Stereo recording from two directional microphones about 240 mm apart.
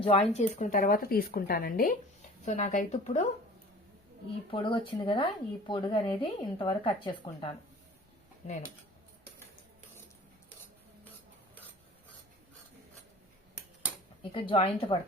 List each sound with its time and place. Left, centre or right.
0.0 s speech: left
4.5 s speech: left
14.2 s speech: left